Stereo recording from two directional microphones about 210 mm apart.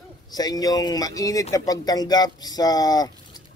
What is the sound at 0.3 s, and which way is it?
A man's voice, 20° left (ahead or behind).